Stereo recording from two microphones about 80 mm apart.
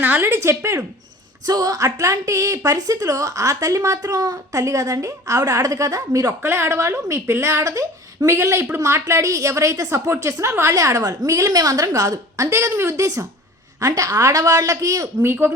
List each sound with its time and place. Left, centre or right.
0.0 s a woman's voice: right
1.5 s a woman's voice: right
6.4 s a woman's voice: right